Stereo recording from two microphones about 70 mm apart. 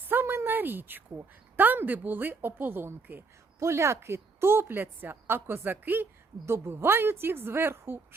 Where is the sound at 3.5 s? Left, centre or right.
Right.